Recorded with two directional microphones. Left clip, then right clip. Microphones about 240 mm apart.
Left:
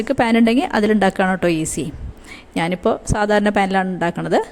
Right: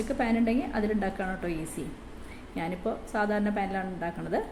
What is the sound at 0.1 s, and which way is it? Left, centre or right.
A woman's voice, left.